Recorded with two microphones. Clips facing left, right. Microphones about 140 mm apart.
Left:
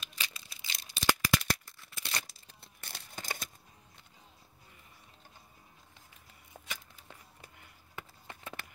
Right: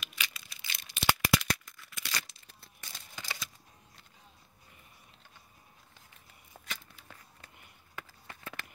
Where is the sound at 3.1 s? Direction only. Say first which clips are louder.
Left 2 dB; 50° left (ahead or behind).